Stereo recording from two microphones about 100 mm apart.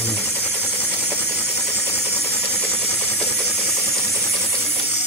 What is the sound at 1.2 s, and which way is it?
Engine, 20° right (ahead or behind).